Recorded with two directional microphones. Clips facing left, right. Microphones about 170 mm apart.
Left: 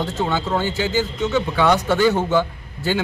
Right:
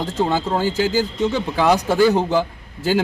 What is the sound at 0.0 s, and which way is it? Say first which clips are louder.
Speech: right 2 dB; 35° right (ahead or behind).